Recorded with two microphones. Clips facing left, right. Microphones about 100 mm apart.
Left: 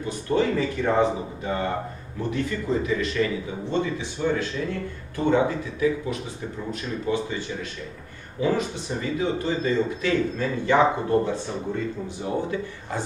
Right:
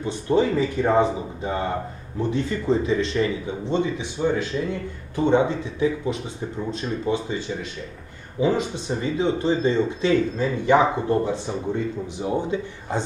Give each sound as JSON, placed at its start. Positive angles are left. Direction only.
{"t": 0.0, "sound": "speech", "side_deg": -20}